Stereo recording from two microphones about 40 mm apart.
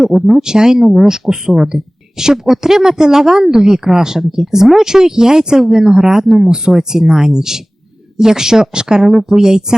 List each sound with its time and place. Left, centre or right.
0.0 s speech: centre